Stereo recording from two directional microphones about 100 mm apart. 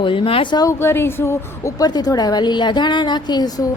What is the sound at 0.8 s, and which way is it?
Speech, 25° left (ahead or behind).